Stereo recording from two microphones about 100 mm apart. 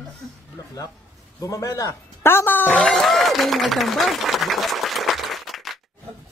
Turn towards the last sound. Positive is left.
turn(degrees=0)  # may be behind; listen again after turning